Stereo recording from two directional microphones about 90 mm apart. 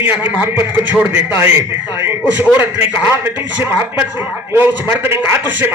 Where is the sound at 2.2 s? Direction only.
20° right (ahead or behind).